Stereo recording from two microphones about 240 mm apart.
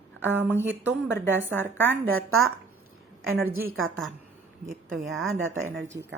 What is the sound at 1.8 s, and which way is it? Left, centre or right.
A woman's voice, right.